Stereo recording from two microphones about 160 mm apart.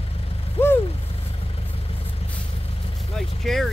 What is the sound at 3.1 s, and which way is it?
Vehicle, centre (ahead or behind).